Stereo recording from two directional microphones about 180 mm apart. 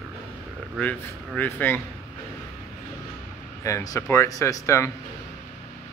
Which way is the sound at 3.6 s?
20° left (ahead or behind).